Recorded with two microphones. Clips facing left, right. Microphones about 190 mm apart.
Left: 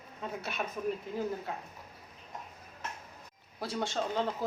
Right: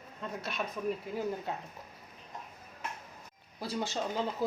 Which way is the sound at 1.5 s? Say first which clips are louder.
Right 2 dB; 20° right (ahead or behind).